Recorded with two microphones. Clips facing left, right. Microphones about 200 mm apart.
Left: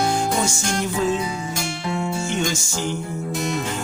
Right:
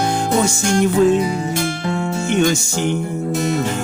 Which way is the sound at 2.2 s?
60° right (ahead or behind).